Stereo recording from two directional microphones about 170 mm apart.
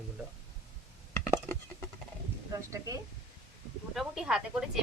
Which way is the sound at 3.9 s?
5° right (ahead or behind).